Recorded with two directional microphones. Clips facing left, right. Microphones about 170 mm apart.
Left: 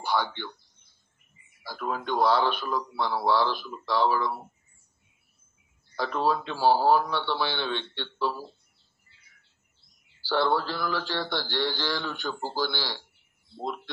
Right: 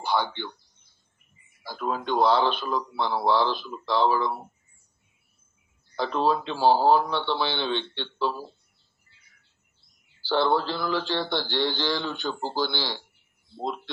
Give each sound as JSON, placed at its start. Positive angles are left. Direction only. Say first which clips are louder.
{"t": 0.0, "sound": "speech", "louder": "right 2 dB", "side_deg": -25}
{"t": 1.6, "sound": "speech", "louder": "right 2 dB", "side_deg": -20}
{"t": 5.9, "sound": "speech", "louder": "right 2 dB", "side_deg": -25}
{"t": 10.2, "sound": "speech", "louder": "right 2 dB", "side_deg": -25}